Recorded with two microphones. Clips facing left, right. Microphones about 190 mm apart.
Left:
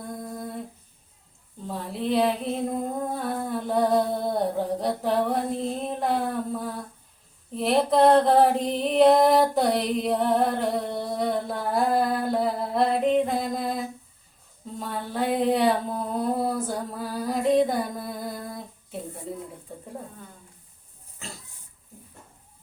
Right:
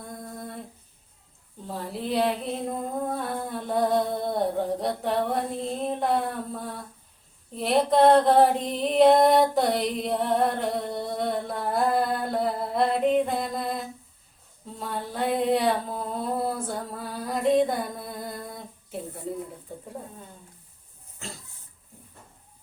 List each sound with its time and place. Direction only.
0.1 s humming: centre (ahead or behind)
1.6 s a sound: centre (ahead or behind)
21.2 s pig: centre (ahead or behind)